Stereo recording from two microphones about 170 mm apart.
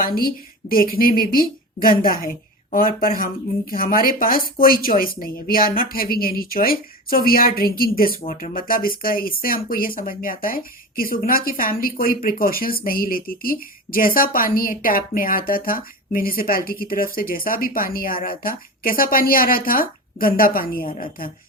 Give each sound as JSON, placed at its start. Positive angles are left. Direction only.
{"t": 0.0, "sound": "speech", "side_deg": 60}